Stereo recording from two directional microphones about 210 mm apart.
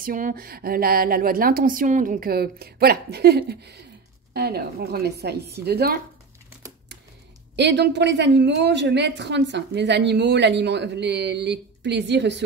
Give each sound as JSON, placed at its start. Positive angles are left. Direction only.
{"t": 0.0, "sound": "a woman's voice", "side_deg": -40}
{"t": 7.5, "sound": "speech", "side_deg": -55}